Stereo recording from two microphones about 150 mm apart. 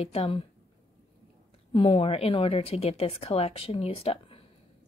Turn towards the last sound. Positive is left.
turn(degrees=40)  # may be behind; listen again after turning